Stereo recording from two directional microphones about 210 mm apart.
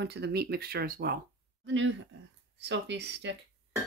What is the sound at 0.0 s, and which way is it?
Speech, 50° right (ahead or behind).